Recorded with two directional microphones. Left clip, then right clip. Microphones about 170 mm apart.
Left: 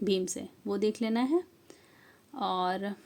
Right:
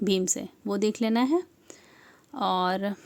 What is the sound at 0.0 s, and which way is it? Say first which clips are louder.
Speech: right 4 dB; 30° right (ahead or behind).